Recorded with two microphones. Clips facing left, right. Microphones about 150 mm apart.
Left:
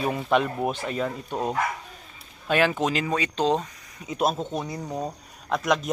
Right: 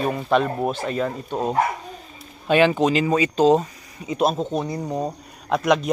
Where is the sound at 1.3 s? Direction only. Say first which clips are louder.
Right 5 dB; 20° right (ahead or behind).